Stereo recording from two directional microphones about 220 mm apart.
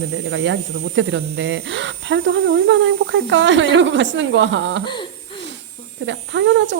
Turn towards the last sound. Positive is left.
turn(degrees=-55)  # may be behind; listen again after turning